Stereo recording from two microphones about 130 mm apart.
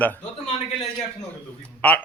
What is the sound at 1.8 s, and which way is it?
Speech, 10° left (ahead or behind).